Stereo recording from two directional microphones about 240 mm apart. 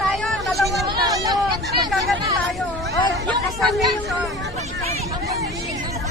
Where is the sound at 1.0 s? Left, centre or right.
Centre.